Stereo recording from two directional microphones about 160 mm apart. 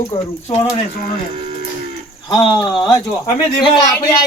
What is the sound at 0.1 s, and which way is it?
Speech, 35° left (ahead or behind).